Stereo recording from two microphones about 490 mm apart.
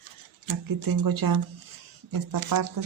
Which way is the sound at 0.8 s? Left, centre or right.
Right.